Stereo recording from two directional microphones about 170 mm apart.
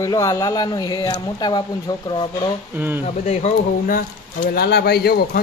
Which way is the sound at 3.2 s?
40° left (ahead or behind).